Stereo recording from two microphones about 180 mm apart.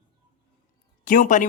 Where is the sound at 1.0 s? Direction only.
50° left (ahead or behind).